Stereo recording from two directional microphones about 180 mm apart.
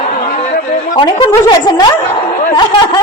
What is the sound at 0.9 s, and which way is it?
Speech, 25° left (ahead or behind).